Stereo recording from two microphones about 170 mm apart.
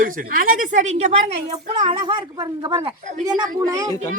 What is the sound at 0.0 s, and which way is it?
A woman's voice, 55° right (ahead or behind).